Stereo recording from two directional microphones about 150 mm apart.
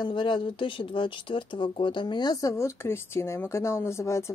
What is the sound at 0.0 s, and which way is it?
Speech, 35° left (ahead or behind).